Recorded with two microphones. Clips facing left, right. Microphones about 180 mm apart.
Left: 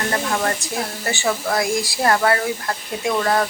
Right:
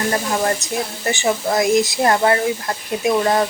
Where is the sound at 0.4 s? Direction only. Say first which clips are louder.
Right 3 dB; 20° right (ahead or behind).